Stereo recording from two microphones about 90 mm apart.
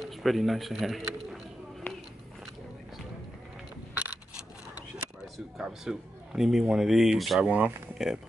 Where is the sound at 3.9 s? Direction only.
20° right (ahead or behind).